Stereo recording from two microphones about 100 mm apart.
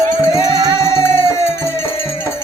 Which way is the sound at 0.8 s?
25° left (ahead or behind).